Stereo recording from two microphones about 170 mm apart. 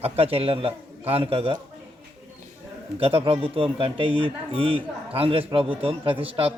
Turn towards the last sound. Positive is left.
turn(degrees=-35)  # may be behind; listen again after turning